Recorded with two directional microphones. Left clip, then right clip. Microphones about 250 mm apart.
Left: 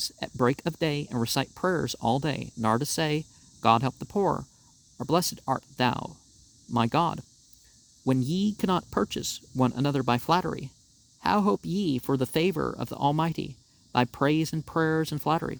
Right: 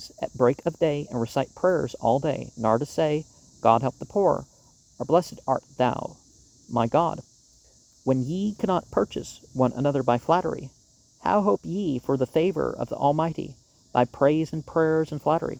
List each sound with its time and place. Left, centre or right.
0.0 s speech: left